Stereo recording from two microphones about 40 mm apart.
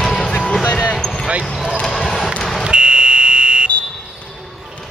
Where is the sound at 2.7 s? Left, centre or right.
Right.